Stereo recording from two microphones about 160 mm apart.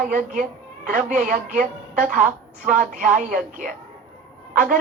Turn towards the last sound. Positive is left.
turn(degrees=-60)  # may be behind; listen again after turning